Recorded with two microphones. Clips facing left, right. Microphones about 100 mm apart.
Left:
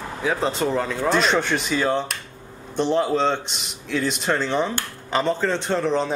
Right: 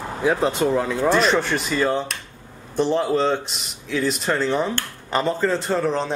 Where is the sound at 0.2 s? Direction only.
5° right (ahead or behind).